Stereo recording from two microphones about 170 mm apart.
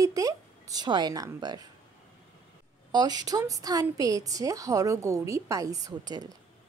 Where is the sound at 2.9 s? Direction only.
25° right (ahead or behind).